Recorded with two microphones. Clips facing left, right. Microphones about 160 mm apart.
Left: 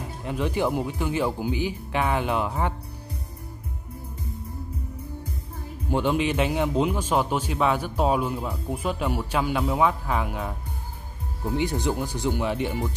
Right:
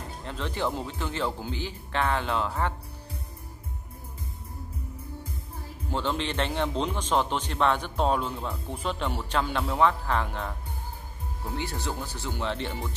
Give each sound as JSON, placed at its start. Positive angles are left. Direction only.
{"t": 0.2, "sound": "a man's voice", "side_deg": 15}
{"t": 5.9, "sound": "a man's voice", "side_deg": 15}